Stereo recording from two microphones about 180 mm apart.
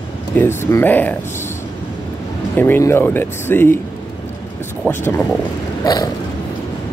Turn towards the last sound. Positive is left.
turn(degrees=20)  # may be behind; listen again after turning